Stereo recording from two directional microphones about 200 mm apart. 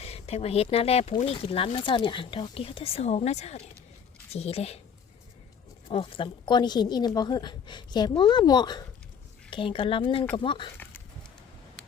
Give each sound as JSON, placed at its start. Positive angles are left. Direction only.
{"t": 0.0, "sound": "speech", "side_deg": 30}
{"t": 5.9, "sound": "speech", "side_deg": 30}